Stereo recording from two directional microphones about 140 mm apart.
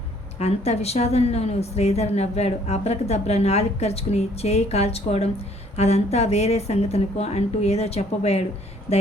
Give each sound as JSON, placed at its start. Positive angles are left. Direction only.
{"t": 0.3, "sound": "a woman's voice", "side_deg": 50}